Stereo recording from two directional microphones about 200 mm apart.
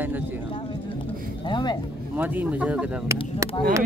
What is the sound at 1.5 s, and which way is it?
Speech, 20° left (ahead or behind).